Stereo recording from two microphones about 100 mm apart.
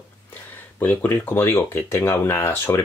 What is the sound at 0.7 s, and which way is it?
Speech, 20° left (ahead or behind).